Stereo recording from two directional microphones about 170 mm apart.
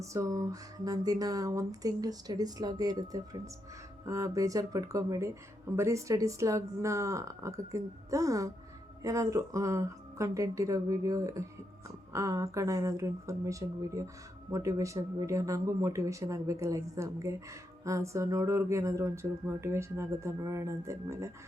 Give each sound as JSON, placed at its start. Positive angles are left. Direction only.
{"t": 0.0, "sound": "speech", "side_deg": -20}